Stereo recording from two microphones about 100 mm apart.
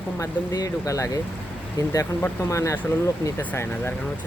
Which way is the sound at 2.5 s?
30° left (ahead or behind).